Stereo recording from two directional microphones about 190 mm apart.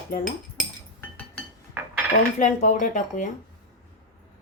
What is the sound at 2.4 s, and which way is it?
Speech, 40° left (ahead or behind).